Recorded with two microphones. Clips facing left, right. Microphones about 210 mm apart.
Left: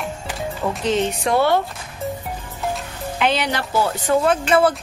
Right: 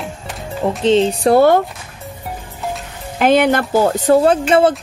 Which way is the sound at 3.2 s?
50° right (ahead or behind).